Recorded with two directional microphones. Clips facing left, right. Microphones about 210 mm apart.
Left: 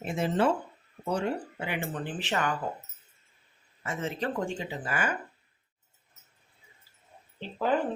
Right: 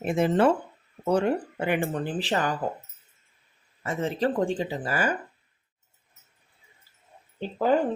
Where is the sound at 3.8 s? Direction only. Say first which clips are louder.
Right 6 dB; 35° right (ahead or behind).